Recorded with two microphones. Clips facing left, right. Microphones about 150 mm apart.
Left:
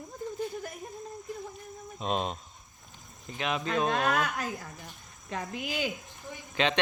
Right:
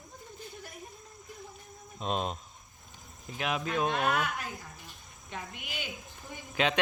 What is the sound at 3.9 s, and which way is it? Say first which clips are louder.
Speech: left 2 dB; 40° left (ahead or behind).